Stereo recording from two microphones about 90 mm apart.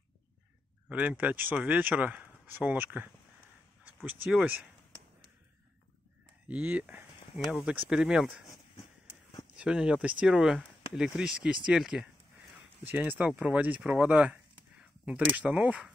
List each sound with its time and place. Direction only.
0.8 s speech: 15° right (ahead or behind)
3.8 s a sound: 20° right (ahead or behind)
4.3 s speech: 15° right (ahead or behind)
6.4 s speech: 15° right (ahead or behind)
7.9 s speech: 10° right (ahead or behind)
9.6 s speech: 10° right (ahead or behind)
12.8 s speech: 20° right (ahead or behind)